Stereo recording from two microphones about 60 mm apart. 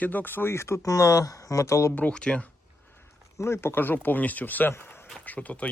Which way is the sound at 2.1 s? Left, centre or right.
Centre.